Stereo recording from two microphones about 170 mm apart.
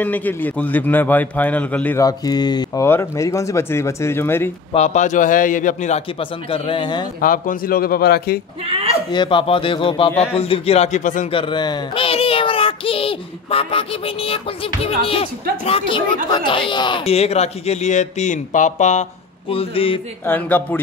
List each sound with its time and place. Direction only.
0.0 s speech: 10° left (ahead or behind)
2.0 s speech: 25° left (ahead or behind)
4.7 s a man's voice: 45° left (ahead or behind); by 7.1 s 25° left (ahead or behind)
7.2 s speech: 55° left (ahead or behind)
9.1 s speech: 30° left (ahead or behind); by 11.2 s 45° left (ahead or behind)
11.3 s a child's voice: 30° left (ahead or behind); by 19.0 s 45° left (ahead or behind)
19.5 s speech: 35° left (ahead or behind)
20.2 s speech: 10° left (ahead or behind)